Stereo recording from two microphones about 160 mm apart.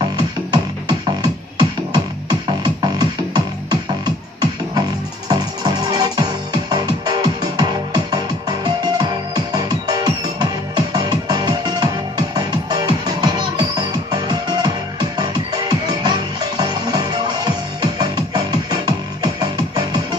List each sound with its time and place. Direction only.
0.5 s music: 25° right (ahead or behind)